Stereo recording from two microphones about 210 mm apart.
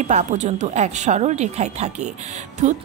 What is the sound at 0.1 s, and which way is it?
A woman's voice, 35° right (ahead or behind).